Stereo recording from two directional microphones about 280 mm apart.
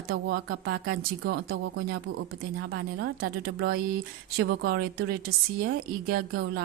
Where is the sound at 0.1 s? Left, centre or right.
Right.